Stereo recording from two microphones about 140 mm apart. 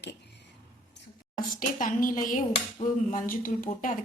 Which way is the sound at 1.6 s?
75° left (ahead or behind).